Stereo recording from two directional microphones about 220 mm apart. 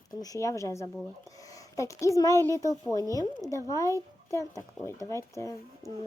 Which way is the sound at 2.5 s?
15° right (ahead or behind).